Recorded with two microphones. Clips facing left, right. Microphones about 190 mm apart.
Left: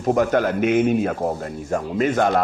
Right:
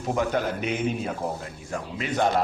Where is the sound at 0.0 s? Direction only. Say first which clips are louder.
Left 7 dB; 50° left (ahead or behind).